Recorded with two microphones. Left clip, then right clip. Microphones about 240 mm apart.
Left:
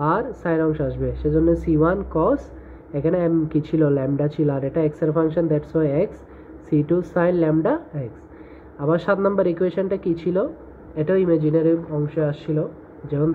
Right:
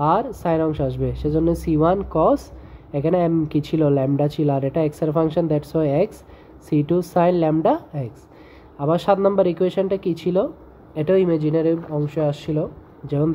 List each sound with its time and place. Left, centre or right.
0.0 s a woman's voice: right